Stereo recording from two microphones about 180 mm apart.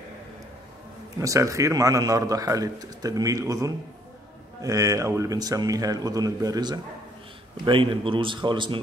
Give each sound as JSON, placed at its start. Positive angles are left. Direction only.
{"t": 1.2, "sound": "a man's voice", "side_deg": -15}